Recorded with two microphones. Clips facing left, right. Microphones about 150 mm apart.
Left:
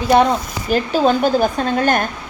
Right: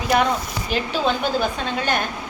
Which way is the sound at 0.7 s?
45° left (ahead or behind).